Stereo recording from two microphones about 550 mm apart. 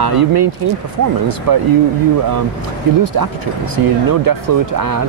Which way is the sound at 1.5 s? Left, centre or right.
Right.